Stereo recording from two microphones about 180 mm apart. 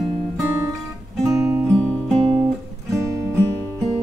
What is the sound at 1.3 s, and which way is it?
Music, 15° right (ahead or behind).